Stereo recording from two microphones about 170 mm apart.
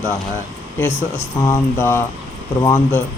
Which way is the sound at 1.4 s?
15° left (ahead or behind).